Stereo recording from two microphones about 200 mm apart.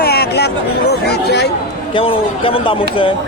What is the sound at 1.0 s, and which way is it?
Speech, 55° left (ahead or behind).